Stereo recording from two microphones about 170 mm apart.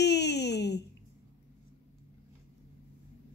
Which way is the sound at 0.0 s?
85° left.